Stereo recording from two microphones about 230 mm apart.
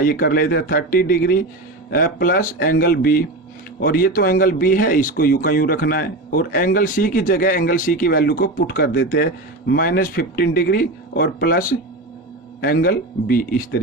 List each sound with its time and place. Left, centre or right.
0.0 s speech: left